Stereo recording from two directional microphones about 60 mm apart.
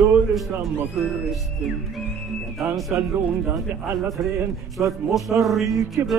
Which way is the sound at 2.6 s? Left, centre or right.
Centre.